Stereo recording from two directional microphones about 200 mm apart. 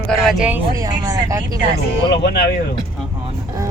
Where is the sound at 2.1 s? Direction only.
55° left (ahead or behind).